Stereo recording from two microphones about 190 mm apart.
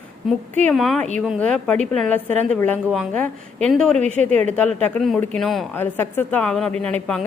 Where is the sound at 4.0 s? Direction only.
40° right (ahead or behind).